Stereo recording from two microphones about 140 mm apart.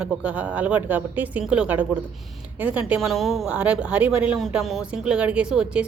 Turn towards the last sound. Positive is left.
turn(degrees=-5)  # may be behind; listen again after turning